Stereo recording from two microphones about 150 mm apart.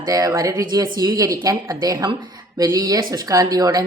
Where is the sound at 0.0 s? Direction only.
25° right (ahead or behind).